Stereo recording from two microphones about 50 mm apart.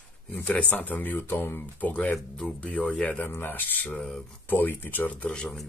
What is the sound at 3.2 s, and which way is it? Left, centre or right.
Speech, left.